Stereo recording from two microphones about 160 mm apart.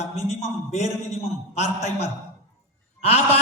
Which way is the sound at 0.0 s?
45° left (ahead or behind).